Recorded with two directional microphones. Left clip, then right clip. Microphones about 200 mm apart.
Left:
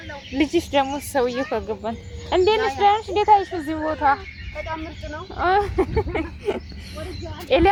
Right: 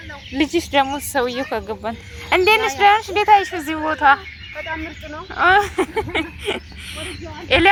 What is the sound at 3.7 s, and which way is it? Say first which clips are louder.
Speech: right 5 dB; 15° right (ahead or behind).